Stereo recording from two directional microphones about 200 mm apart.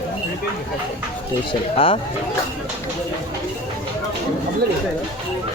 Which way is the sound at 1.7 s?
25° left (ahead or behind).